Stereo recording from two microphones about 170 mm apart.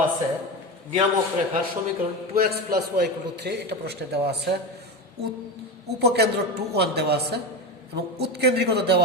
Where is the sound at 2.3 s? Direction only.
65° right (ahead or behind).